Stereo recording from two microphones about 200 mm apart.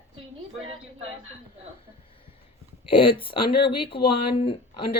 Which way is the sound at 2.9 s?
25° left (ahead or behind).